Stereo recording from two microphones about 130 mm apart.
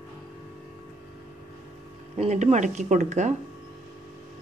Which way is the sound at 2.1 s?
60° right (ahead or behind).